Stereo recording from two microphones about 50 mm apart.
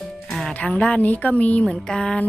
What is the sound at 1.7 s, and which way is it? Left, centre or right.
Speech, centre.